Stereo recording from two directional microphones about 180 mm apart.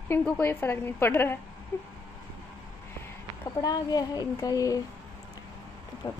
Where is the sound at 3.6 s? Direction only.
20° left (ahead or behind).